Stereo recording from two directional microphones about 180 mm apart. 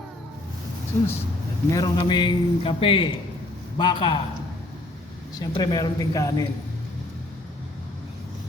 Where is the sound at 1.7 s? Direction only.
20° left (ahead or behind).